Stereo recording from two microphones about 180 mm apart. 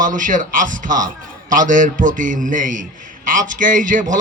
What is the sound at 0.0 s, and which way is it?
A man's voice, 45° right (ahead or behind).